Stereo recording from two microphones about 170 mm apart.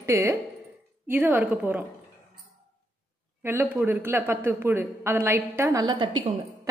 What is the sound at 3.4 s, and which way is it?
A woman's voice, 10° right (ahead or behind).